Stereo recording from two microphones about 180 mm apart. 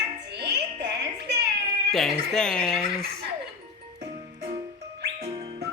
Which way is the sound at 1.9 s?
5° left (ahead or behind).